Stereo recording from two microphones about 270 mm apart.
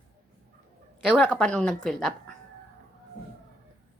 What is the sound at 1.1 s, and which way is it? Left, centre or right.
A woman's voice, centre.